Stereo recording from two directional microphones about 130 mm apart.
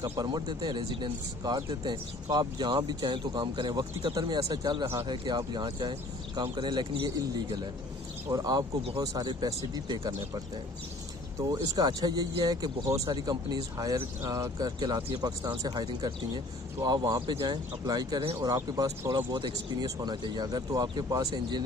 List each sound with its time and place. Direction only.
0.0 s speech: 30° right (ahead or behind)
11.3 s speech: 30° right (ahead or behind)